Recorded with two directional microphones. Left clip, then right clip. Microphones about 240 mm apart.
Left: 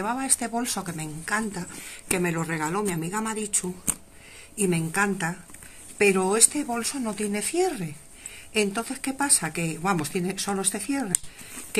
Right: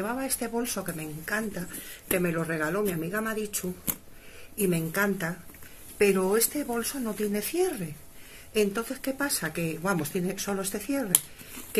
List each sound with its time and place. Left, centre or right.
0.0 s speech: left
9.0 s speech: left